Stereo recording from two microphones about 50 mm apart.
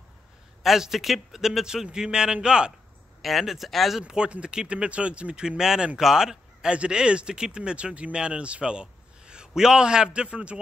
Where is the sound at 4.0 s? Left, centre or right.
Centre.